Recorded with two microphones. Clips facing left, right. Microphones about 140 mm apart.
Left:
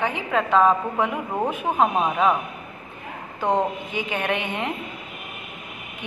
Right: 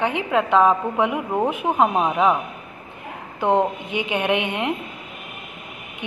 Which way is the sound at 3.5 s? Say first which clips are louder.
Right 3 dB; 65° right (ahead or behind).